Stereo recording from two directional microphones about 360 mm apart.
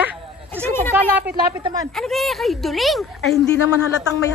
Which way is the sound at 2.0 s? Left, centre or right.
Centre.